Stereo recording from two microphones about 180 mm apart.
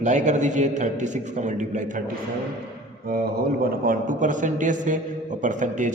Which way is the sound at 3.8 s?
50° right (ahead or behind).